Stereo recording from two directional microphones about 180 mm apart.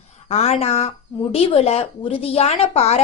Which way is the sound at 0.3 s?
35° left (ahead or behind).